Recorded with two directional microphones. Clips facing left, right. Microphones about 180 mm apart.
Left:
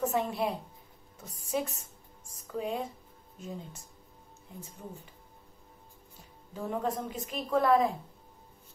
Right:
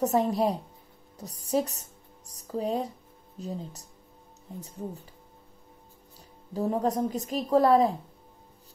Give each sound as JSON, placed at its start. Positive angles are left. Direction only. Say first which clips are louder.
{"t": 0.0, "sound": "speech", "louder": "right 6 dB", "side_deg": -40}
{"t": 6.1, "sound": "a woman's voice", "louder": "right 9 dB", "side_deg": -35}